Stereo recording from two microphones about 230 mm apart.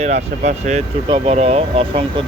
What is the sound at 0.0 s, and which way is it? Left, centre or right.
Speech, right.